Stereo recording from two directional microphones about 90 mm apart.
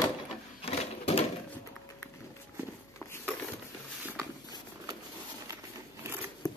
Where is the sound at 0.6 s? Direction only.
90° left.